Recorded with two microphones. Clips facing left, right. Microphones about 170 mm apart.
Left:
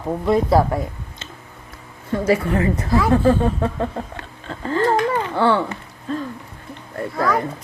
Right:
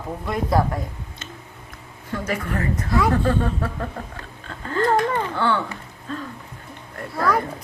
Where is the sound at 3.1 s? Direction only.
25° left (ahead or behind).